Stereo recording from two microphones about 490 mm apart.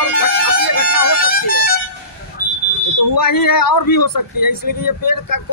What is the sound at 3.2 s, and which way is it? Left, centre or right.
A man's voice, left.